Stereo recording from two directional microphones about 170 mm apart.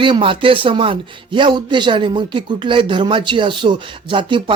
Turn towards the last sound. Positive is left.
turn(degrees=-30)  # may be behind; listen again after turning